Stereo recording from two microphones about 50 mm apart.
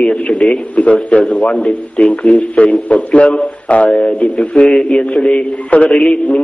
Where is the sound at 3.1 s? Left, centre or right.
Left.